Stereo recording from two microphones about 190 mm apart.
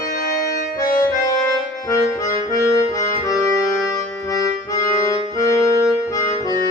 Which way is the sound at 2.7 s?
15° left (ahead or behind).